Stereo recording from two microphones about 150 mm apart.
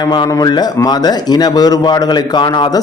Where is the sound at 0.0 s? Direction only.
25° left (ahead or behind).